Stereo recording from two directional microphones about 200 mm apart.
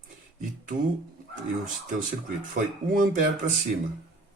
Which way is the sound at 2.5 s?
40° right (ahead or behind).